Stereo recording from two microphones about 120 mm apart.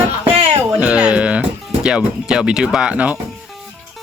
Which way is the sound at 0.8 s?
10° right (ahead or behind).